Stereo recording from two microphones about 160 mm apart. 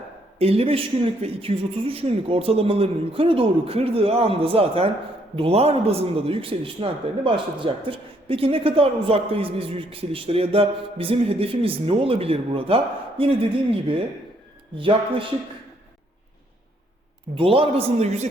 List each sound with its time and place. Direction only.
0.3 s a man's voice: 40° right (ahead or behind)
17.3 s a man's voice: 35° right (ahead or behind)